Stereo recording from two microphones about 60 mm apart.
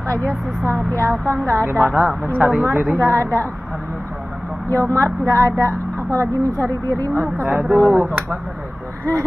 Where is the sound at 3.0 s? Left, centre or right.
Right.